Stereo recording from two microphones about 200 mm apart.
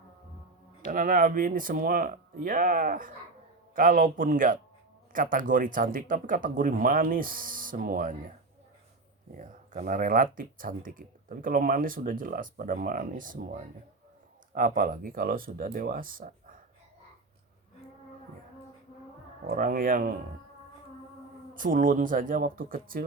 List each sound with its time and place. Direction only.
0.9 s speech: 40° right (ahead or behind)
9.4 s speech: 40° right (ahead or behind)
19.5 s speech: 45° right (ahead or behind)
21.5 s speech: 45° right (ahead or behind)